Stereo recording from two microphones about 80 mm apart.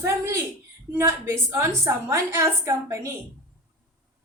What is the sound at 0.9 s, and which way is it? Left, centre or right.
A woman's voice, right.